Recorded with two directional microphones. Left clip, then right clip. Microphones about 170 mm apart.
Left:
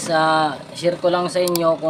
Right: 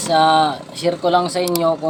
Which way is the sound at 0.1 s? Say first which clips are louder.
Right 3 dB; centre (ahead or behind).